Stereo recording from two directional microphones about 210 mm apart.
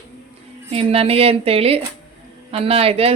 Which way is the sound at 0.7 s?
30° right (ahead or behind).